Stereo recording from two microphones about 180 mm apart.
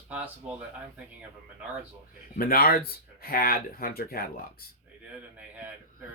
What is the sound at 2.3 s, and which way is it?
Speech, 55° left (ahead or behind).